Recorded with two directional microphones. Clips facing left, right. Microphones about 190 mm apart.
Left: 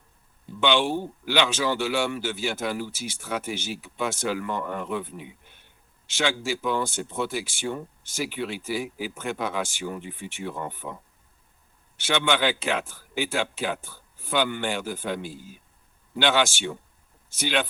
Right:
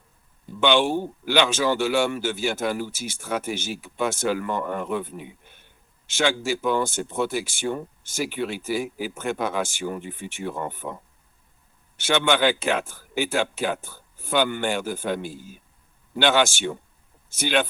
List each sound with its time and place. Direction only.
0.6 s a man's voice: 45° right (ahead or behind)
11.9 s a man's voice: 45° right (ahead or behind)